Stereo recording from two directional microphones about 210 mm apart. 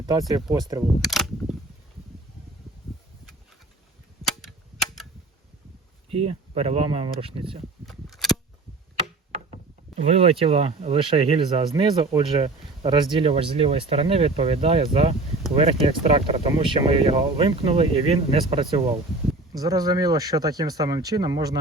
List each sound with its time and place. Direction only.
0.0 s speech: 20° right (ahead or behind)
1.0 s camera: centre (ahead or behind)
4.3 s cap gun: centre (ahead or behind)
6.1 s speech: 25° right (ahead or behind)
7.9 s a sound: centre (ahead or behind)
10.1 s speech: 25° right (ahead or behind)